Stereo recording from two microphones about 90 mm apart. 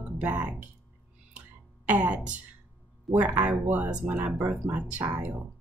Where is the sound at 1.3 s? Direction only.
15° right (ahead or behind).